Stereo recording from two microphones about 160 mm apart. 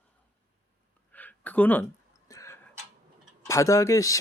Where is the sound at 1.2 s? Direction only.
10° left (ahead or behind).